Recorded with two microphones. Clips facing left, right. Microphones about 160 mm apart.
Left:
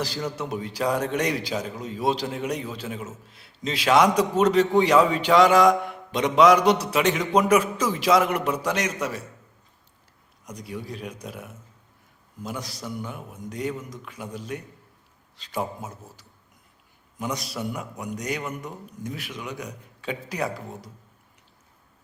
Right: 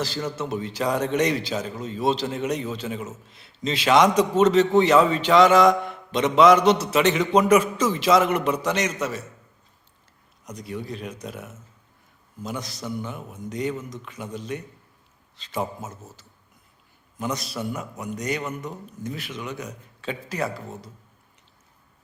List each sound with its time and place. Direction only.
0.3 s a man's voice: 10° left (ahead or behind)
10.4 s a man's voice: 10° left (ahead or behind)
12.4 s a man's voice: 10° left (ahead or behind)
17.3 s a man's voice: 15° left (ahead or behind)